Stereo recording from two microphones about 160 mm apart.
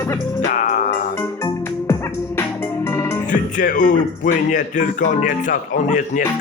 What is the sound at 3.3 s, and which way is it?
Speech, 55° left (ahead or behind).